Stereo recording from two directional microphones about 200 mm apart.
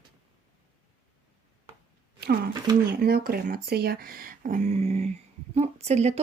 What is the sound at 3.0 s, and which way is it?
Speech, 50° right (ahead or behind).